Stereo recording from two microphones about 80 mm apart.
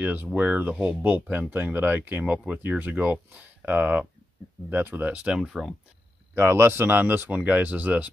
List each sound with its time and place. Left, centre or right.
0.0 s speech: centre
5.4 s speech: centre
6.3 s speech: right